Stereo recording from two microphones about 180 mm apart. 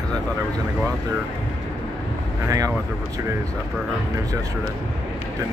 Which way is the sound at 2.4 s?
20° right (ahead or behind).